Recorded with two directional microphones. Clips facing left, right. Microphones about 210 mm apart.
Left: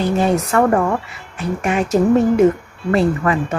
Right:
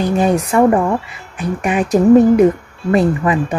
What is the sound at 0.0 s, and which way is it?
A woman's voice, 15° right (ahead or behind).